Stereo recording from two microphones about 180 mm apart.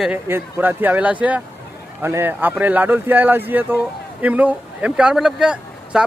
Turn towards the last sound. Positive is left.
turn(degrees=-5)  # may be behind; listen again after turning